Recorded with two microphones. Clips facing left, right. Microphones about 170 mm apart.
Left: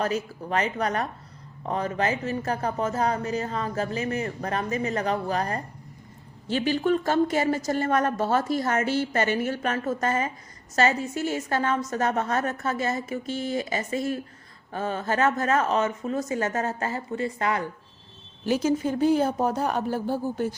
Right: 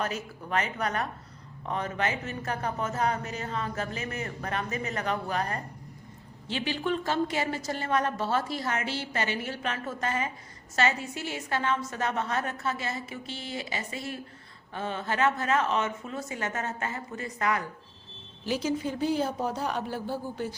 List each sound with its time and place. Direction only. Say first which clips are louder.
0.0 s a woman's voice: left 6 dB; 35° left (ahead or behind)
18.4 s a woman's voice: left 5 dB; 50° left (ahead or behind)